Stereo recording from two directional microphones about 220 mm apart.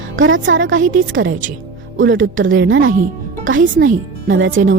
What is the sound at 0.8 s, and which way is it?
Speech, 40° right (ahead or behind).